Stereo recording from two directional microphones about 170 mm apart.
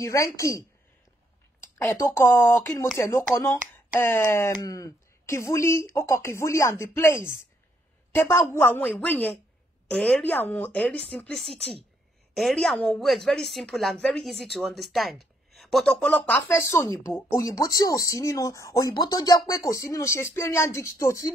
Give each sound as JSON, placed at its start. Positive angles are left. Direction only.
{"t": 0.0, "sound": "a woman's voice", "side_deg": 20}